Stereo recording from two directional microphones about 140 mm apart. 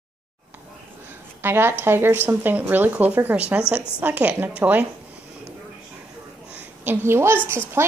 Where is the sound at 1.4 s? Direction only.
15° right (ahead or behind).